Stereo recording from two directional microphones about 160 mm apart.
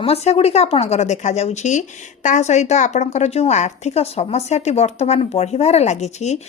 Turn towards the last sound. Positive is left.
turn(degrees=45)  # may be behind; listen again after turning